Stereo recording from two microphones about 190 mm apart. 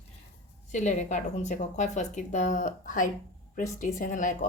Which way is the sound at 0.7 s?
40° left (ahead or behind).